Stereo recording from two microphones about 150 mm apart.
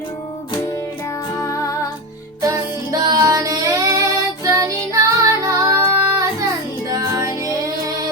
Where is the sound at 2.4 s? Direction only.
25° right (ahead or behind).